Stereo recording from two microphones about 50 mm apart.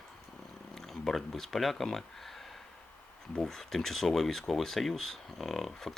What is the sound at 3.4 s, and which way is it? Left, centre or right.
Speech, centre.